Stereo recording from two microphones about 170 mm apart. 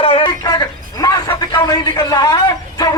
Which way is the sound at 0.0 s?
35° left (ahead or behind).